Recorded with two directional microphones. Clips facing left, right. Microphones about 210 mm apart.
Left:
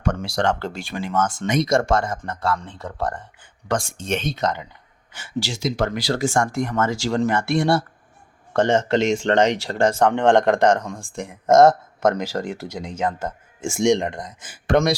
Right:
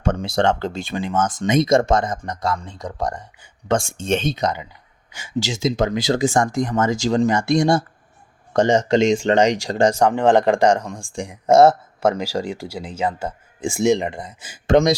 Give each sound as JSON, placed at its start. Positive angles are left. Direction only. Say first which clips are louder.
{"t": 0.0, "sound": "speech", "louder": "right 3 dB", "side_deg": -20}
{"t": 3.7, "sound": "speech", "louder": "right 4 dB", "side_deg": -25}
{"t": 4.4, "sound": "speech", "louder": "right 1 dB", "side_deg": -10}
{"t": 14.7, "sound": "speech", "louder": "right 3 dB", "side_deg": -20}